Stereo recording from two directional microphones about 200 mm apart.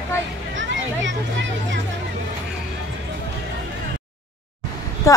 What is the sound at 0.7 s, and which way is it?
A child's voice, 65° right (ahead or behind).